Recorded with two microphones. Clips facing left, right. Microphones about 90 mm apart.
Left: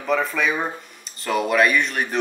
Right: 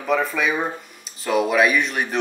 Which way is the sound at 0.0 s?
Centre (ahead or behind).